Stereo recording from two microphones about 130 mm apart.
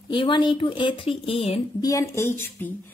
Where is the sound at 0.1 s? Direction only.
40° left (ahead or behind).